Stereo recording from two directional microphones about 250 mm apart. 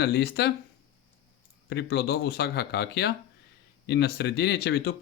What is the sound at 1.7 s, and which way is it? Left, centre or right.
Speech, left.